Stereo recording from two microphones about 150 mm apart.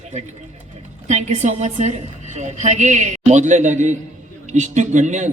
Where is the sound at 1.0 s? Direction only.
50° right (ahead or behind).